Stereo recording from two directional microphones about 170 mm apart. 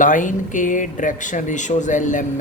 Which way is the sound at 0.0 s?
50° left (ahead or behind).